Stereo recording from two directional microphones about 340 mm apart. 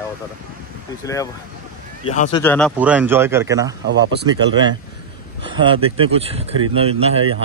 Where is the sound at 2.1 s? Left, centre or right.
Centre.